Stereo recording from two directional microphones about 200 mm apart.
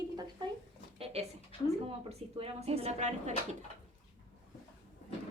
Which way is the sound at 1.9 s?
30° right (ahead or behind).